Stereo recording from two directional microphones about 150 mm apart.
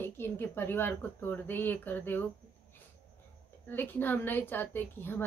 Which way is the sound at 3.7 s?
15° left (ahead or behind).